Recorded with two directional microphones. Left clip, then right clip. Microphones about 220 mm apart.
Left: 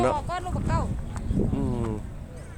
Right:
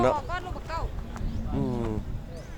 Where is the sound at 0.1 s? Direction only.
35° left (ahead or behind).